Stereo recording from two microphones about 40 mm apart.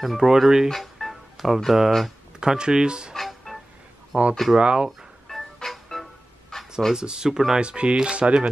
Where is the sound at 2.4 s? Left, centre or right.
Centre.